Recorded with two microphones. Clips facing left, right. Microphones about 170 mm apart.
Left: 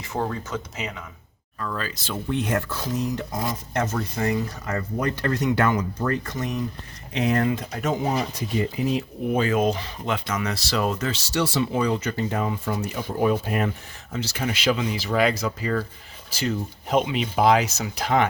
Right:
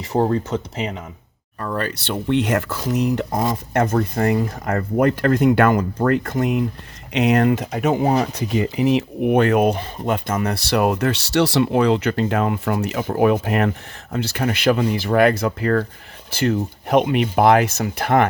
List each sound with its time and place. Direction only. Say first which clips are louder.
0.1 s speech: right 9 dB; 35° right (ahead or behind)
1.5 s speech: right 5 dB; 45° right (ahead or behind)
1.8 s speech: right 6 dB; 70° right (ahead or behind)
7.1 s speech: right 6 dB; 75° right (ahead or behind); by 18.3 s 55° right (ahead or behind)